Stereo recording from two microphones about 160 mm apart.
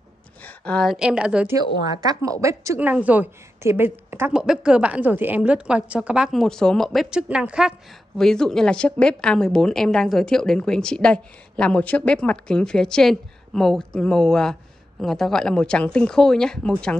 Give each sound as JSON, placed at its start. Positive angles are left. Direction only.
{"t": 0.7, "sound": "a woman's voice", "side_deg": 5}
{"t": 1.5, "sound": "a woman's voice", "side_deg": -20}